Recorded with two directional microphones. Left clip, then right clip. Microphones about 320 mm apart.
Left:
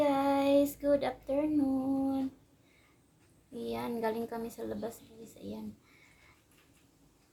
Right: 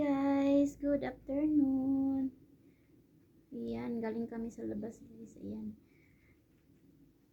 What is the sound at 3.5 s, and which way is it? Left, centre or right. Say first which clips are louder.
A woman's voice: left 4 dB; centre.